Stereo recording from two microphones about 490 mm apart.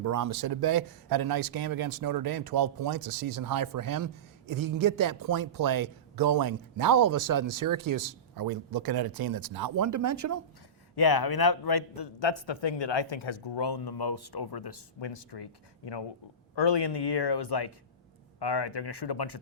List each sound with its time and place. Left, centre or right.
0.0 s speech: right
10.9 s a man's voice: left